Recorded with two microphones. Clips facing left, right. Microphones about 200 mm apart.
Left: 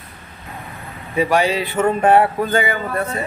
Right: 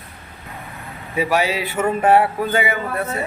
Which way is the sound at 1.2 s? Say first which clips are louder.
Left 3 dB; 5° right (ahead or behind).